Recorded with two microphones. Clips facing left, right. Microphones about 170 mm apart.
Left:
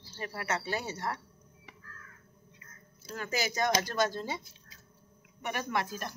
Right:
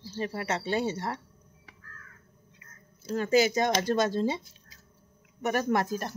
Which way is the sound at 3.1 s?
30° right (ahead or behind).